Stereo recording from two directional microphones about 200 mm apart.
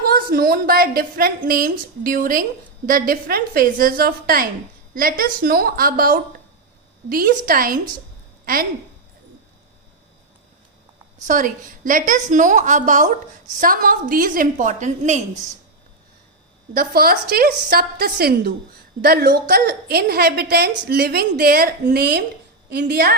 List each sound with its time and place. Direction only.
0.1 s a woman's voice: 45° right (ahead or behind)
11.3 s a woman's voice: 40° right (ahead or behind)
16.7 s a woman's voice: 50° right (ahead or behind)